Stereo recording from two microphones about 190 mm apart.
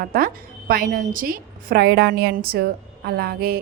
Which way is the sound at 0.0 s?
50° right (ahead or behind).